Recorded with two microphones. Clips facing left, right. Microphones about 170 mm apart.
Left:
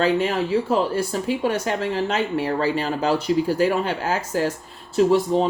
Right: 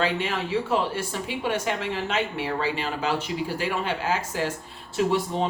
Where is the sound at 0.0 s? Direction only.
40° left (ahead or behind).